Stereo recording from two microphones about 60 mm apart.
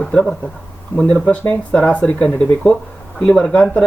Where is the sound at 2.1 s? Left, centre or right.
Centre.